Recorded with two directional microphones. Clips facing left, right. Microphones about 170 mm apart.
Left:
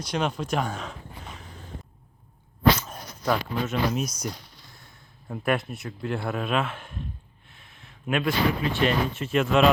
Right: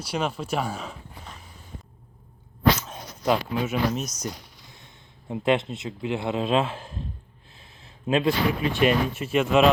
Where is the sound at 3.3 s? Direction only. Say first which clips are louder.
Right 2 dB; 10° right (ahead or behind).